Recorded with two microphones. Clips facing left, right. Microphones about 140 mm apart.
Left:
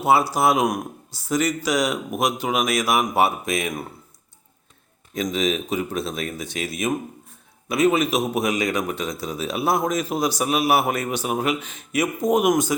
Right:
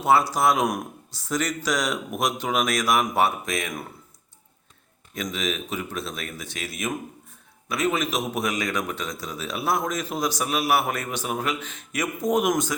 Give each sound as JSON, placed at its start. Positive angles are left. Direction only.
{"t": 0.0, "sound": "speech", "side_deg": 5}
{"t": 5.1, "sound": "a man's voice", "side_deg": 25}